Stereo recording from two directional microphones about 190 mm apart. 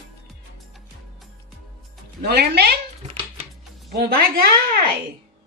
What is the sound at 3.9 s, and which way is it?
Speech, 55° right (ahead or behind).